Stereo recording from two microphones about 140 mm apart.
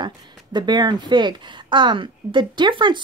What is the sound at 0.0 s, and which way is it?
Speech, 30° right (ahead or behind).